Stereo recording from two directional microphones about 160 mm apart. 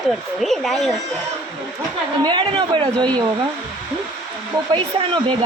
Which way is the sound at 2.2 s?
30° right (ahead or behind).